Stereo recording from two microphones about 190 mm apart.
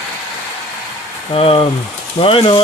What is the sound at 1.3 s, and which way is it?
Speech, 25° left (ahead or behind).